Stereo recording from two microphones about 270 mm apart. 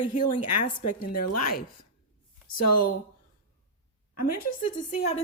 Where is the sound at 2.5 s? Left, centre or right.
Left.